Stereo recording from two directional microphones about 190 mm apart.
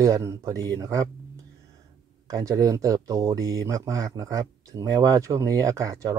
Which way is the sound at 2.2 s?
20° right (ahead or behind).